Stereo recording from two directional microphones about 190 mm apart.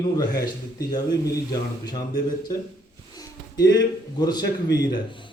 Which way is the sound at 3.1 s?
20° left (ahead or behind).